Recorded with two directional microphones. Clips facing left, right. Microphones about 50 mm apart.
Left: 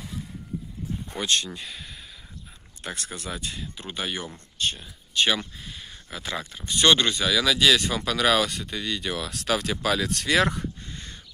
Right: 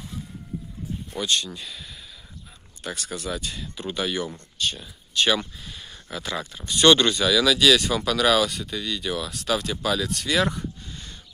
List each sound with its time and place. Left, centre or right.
1.1 s speech: left
2.8 s speech: left
5.6 s a sound: left
6.0 s speech: centre
8.5 s speech: left
10.9 s a sound: left